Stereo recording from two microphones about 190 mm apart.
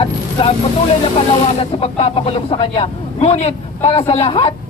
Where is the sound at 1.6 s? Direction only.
30° left (ahead or behind).